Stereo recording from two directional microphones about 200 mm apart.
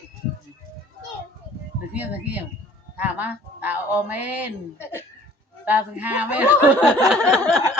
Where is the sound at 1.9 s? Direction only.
5° right (ahead or behind).